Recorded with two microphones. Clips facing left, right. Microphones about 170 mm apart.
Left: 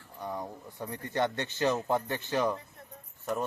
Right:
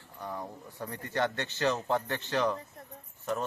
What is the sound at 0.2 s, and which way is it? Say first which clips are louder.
Speech: left 2 dB; 10° left (ahead or behind).